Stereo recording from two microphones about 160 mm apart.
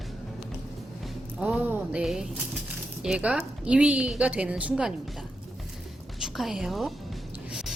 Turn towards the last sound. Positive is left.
turn(degrees=-5)  # may be behind; listen again after turning